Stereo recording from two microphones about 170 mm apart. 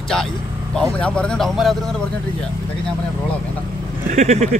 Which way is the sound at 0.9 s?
5° left (ahead or behind).